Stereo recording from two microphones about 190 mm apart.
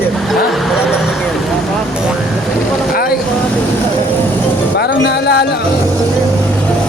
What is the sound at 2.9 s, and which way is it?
Vehicle, 50° left (ahead or behind).